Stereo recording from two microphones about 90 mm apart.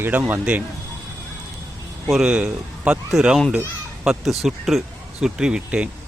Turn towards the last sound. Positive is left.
turn(degrees=-10)  # may be behind; listen again after turning